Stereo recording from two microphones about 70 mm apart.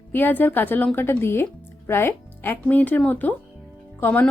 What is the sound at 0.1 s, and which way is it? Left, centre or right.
Speech, left.